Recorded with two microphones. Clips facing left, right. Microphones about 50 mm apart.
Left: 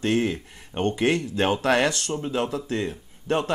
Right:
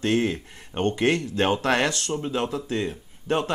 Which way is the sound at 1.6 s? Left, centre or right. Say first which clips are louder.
Left 1 dB; right.